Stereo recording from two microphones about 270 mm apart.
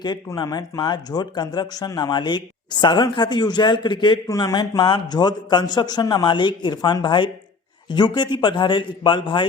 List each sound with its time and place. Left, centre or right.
0.0 s speech: centre